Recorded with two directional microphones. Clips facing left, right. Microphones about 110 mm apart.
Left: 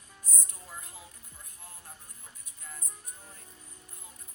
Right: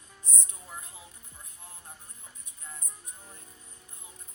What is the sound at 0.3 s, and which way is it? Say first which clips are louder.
Music: right 2 dB; 20° right (ahead or behind).